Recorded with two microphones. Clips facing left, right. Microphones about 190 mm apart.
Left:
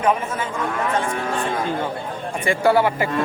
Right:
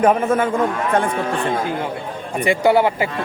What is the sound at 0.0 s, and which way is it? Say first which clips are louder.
Speech: right 6 dB; 55° right (ahead or behind).